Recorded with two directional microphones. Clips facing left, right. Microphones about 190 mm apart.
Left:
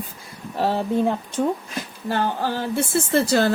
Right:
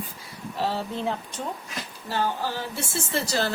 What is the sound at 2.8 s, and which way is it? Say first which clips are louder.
Speech: left 11 dB; 55° left (ahead or behind).